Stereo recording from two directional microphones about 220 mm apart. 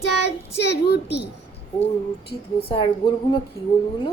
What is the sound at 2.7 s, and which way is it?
Speech, 20° left (ahead or behind).